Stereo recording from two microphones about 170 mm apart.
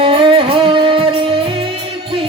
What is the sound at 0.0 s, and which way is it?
Music, 30° right (ahead or behind).